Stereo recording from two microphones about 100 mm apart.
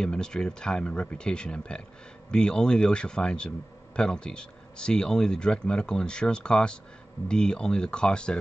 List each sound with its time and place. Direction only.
0.0 s speech: 10° left (ahead or behind)